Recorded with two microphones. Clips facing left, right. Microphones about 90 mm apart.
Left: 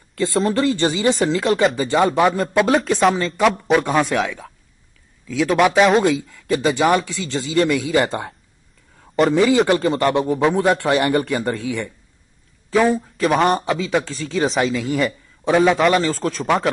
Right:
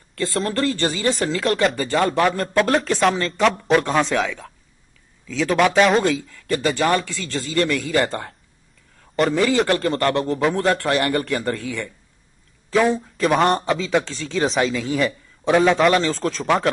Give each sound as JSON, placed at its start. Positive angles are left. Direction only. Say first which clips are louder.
{"t": 0.1, "sound": "speech", "louder": "left 4 dB", "side_deg": 5}
{"t": 1.5, "sound": "speech", "louder": "left 1 dB", "side_deg": 0}
{"t": 1.9, "sound": "speech", "louder": "left 3 dB", "side_deg": 15}
{"t": 2.3, "sound": "speech", "louder": "left 2 dB", "side_deg": 5}